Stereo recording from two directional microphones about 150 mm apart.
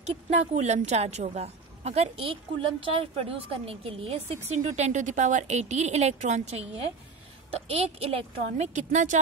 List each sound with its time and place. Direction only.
0.0 s a woman's voice: 45° right (ahead or behind)